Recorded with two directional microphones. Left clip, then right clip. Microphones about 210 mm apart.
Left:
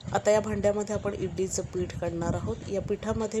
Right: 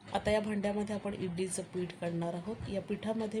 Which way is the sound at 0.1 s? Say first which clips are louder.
Left 8 dB; 20° left (ahead or behind).